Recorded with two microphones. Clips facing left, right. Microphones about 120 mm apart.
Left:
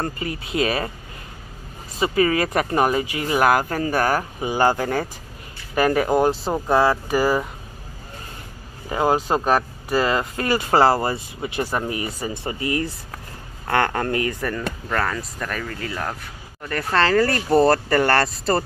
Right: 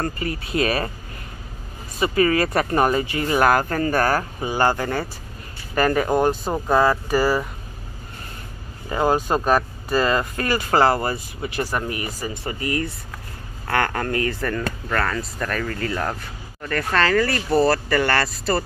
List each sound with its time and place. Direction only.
0.0 s speech: 20° left (ahead or behind)
2.0 s speech: 15° left (ahead or behind)
8.8 s speech: 15° left (ahead or behind)
14.4 s speech: 10° left (ahead or behind)
16.6 s speech: 20° left (ahead or behind); by 18.6 s 35° left (ahead or behind)